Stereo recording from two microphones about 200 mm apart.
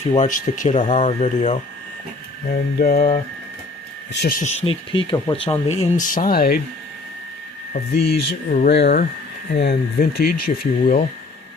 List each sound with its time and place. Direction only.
0.1 s speech: 40° left (ahead or behind)
2.5 s speech: 50° left (ahead or behind)
7.7 s speech: 50° left (ahead or behind)